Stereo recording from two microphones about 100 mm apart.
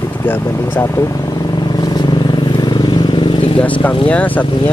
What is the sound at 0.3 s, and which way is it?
Speech, 20° left (ahead or behind).